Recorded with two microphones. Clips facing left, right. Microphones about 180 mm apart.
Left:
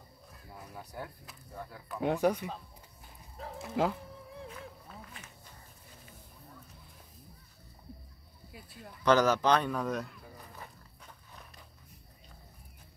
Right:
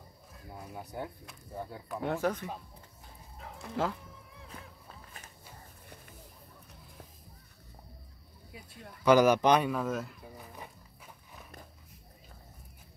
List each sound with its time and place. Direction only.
0.5 s a sound: 20° right (ahead or behind)
1.5 s speech: 25° right (ahead or behind)
2.0 s speech: 15° left (ahead or behind)
3.8 s speech: 15° left (ahead or behind)
8.5 s speech: centre (ahead or behind)
9.0 s speech: 15° right (ahead or behind)
9.7 s speech: centre (ahead or behind)